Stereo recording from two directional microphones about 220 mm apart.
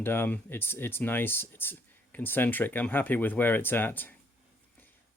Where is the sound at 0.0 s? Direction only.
10° left (ahead or behind).